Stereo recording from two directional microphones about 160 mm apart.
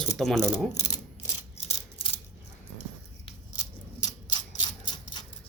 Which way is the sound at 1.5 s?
40° left (ahead or behind).